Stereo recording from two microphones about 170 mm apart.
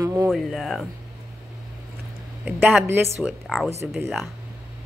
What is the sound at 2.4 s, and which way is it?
Speech, 10° right (ahead or behind).